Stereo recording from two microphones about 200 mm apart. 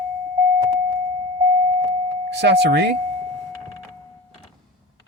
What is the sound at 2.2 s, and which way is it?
Speech, 60° right (ahead or behind).